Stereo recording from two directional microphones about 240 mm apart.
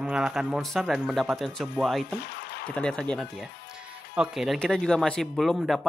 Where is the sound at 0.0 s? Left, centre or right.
Centre.